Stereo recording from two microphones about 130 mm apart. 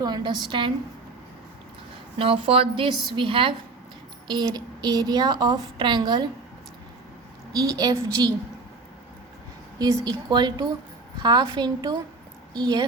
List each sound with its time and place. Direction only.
0.0 s a woman's voice: 30° right (ahead or behind)
2.1 s a woman's voice: 45° right (ahead or behind)
7.5 s a woman's voice: 25° right (ahead or behind)
9.7 s a woman's voice: 30° right (ahead or behind)